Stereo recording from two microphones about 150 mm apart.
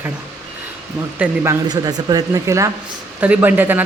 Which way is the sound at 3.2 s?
10° right (ahead or behind).